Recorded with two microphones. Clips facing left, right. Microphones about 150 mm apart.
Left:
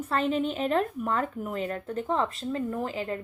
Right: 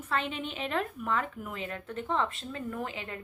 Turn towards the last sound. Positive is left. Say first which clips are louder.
# left 6 dB
turn(degrees=35)  # may be behind; listen again after turning